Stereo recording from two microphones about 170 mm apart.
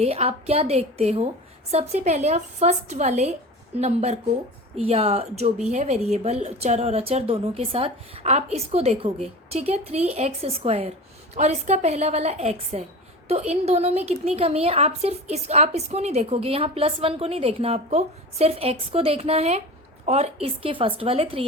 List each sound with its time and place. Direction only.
0.0 s a woman's voice: 35° right (ahead or behind)